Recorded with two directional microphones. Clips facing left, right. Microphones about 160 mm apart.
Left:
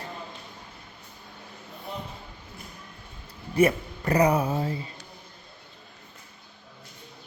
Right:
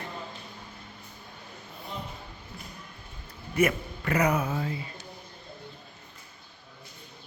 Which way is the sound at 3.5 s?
30° left (ahead or behind).